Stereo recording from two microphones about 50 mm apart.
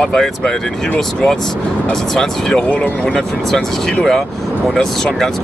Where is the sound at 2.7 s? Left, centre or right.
Left.